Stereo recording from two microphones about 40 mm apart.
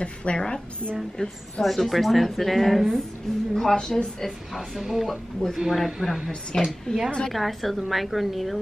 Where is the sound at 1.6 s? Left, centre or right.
Centre.